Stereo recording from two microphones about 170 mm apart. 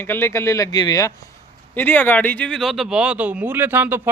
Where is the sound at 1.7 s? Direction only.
10° left (ahead or behind).